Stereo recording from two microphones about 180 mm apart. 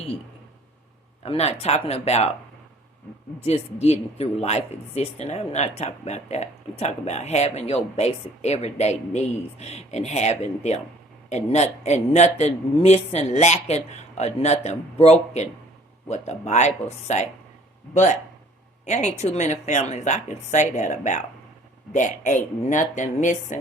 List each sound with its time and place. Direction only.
1.2 s speech: 35° left (ahead or behind)
3.4 s speech: 35° left (ahead or behind)